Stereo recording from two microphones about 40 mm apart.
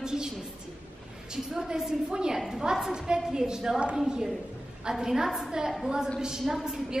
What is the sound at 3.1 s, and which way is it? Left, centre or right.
A woman's voice, centre.